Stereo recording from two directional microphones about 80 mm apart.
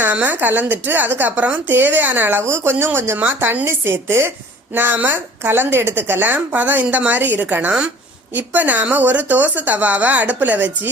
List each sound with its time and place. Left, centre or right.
0.0 s a woman's voice: right